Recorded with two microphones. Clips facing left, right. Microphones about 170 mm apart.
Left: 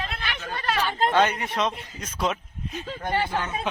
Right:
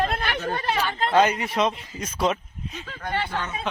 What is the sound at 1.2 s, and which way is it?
Speech, 5° right (ahead or behind).